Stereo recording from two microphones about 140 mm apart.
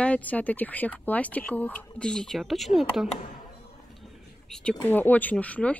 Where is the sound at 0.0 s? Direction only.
10° left (ahead or behind).